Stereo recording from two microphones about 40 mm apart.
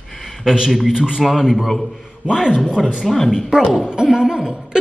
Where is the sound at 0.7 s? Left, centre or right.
Centre.